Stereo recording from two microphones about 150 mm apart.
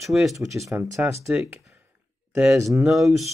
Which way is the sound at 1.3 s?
10° right (ahead or behind).